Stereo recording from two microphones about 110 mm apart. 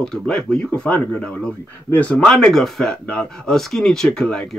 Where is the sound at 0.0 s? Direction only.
5° left (ahead or behind).